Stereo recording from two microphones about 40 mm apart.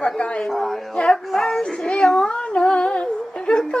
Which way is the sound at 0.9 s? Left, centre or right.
Left.